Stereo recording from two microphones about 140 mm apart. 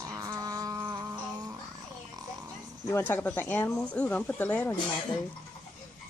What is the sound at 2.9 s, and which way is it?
Speech, 15° left (ahead or behind).